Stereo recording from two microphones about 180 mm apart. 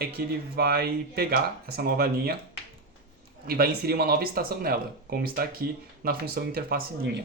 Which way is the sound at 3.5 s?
60° right (ahead or behind).